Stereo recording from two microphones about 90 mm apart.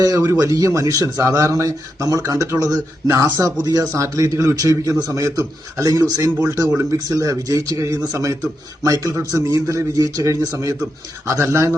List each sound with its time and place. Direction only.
0.3 s a man's voice: 40° right (ahead or behind)